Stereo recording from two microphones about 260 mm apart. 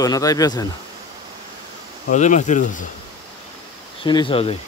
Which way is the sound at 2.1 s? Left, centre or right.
Left.